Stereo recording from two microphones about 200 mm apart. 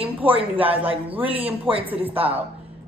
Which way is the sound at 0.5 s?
10° right (ahead or behind).